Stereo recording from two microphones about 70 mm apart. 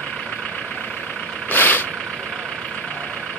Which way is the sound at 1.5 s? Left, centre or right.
Left.